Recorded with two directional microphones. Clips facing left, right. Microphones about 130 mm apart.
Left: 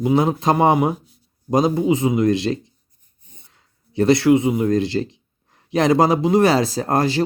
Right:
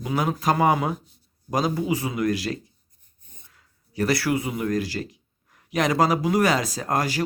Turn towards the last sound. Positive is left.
turn(degrees=30)  # may be behind; listen again after turning